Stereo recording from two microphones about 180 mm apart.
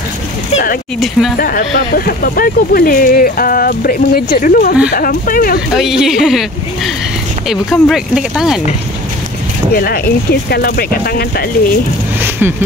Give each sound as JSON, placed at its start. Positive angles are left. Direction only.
{"t": 0.9, "sound": "speech", "side_deg": 0}
{"t": 1.4, "sound": "speech", "side_deg": 55}
{"t": 5.7, "sound": "speech", "side_deg": 0}
{"t": 9.8, "sound": "speech", "side_deg": 55}
{"t": 12.2, "sound": "a sound", "side_deg": -10}